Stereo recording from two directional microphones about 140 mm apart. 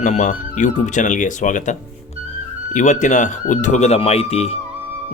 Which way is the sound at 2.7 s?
60° left (ahead or behind).